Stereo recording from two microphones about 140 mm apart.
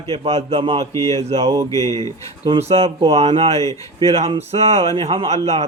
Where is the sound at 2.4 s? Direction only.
45° right (ahead or behind).